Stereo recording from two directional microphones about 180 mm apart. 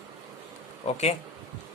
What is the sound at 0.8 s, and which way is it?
Speech, 35° left (ahead or behind).